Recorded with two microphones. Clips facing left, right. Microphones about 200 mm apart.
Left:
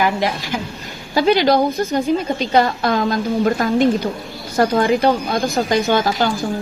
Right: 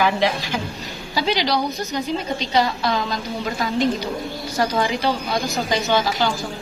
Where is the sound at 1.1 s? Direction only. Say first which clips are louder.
Left 7 dB; 50° left (ahead or behind).